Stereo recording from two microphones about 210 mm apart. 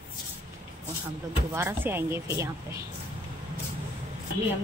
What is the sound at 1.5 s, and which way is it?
A woman's voice, 10° right (ahead or behind).